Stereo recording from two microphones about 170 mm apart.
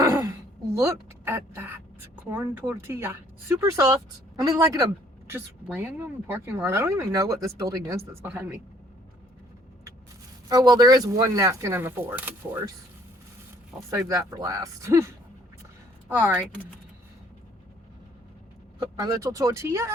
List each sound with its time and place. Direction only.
0.0 s a sound: 20° right (ahead or behind)
0.8 s speech: 15° right (ahead or behind)
5.6 s speech: 10° right (ahead or behind)
10.5 s speech: 25° right (ahead or behind)
13.9 s speech: 15° right (ahead or behind)
18.8 s speech: 20° right (ahead or behind)